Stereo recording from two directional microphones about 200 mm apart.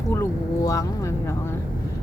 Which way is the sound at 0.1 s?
15° left (ahead or behind).